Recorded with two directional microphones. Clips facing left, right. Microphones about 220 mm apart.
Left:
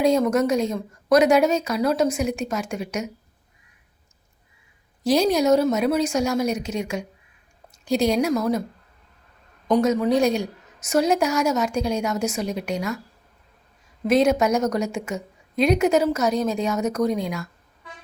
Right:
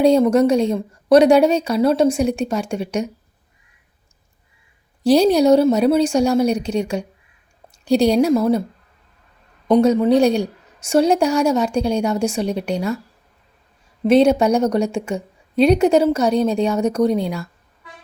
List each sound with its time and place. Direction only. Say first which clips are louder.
0.0 s a woman's voice: right 6 dB; 30° right (ahead or behind)
5.0 s a woman's voice: right 6 dB; 30° right (ahead or behind)
9.7 s a woman's voice: right 5 dB; 30° right (ahead or behind)
14.1 s a woman's voice: right 5 dB; 30° right (ahead or behind)